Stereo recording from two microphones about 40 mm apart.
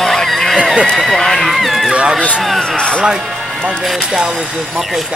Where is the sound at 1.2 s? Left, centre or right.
Centre.